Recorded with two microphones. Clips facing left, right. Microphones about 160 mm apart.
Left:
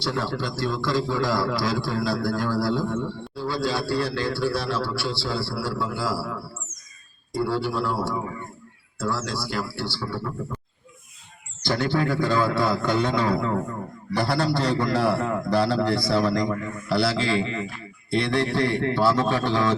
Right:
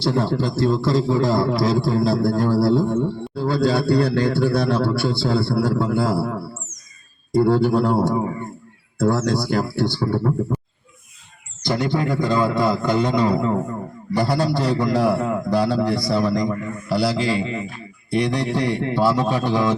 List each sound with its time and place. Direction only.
0.0 s a man's voice: 35° right (ahead or behind)
2.3 s a man's voice: 25° right (ahead or behind); by 10.3 s 45° right (ahead or behind)
11.6 s a man's voice: 15° right (ahead or behind)